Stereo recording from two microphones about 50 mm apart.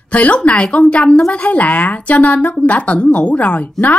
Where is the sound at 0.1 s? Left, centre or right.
Left.